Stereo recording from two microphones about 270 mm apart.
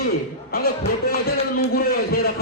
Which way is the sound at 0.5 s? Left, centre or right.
Left.